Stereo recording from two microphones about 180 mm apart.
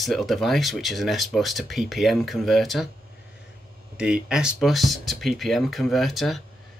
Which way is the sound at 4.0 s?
5° right (ahead or behind).